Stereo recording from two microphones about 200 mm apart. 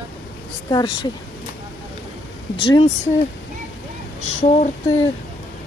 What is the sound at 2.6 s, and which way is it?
Speech, 25° left (ahead or behind).